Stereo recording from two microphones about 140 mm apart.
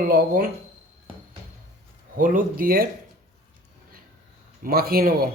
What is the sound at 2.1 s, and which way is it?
Speech, 75° right (ahead or behind).